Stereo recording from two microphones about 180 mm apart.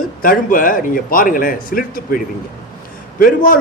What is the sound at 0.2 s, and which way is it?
A man's voice, 50° left (ahead or behind).